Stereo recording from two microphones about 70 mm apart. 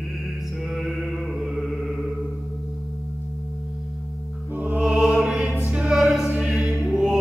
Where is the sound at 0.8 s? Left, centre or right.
Centre.